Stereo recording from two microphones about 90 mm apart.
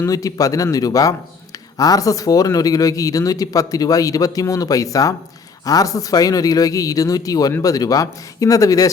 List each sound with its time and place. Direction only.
0.0 s speech: 40° left (ahead or behind)